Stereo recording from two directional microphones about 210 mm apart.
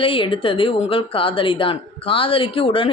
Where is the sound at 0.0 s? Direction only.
25° left (ahead or behind).